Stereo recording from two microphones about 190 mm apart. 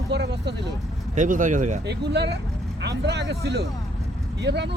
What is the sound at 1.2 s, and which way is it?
Speech, 40° right (ahead or behind).